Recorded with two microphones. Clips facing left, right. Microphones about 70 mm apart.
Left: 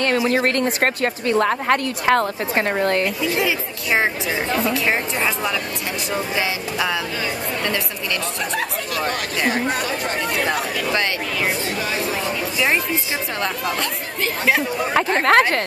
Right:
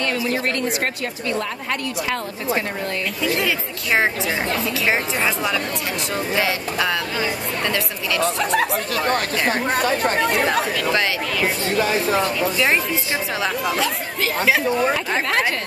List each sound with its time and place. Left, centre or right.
0.0 s a woman's voice: left
3.3 s speech: centre
8.9 s speech: right
10.2 s speech: right
10.5 s speech: centre
11.8 s speech: right
13.4 s speech: centre
15.1 s a woman's voice: left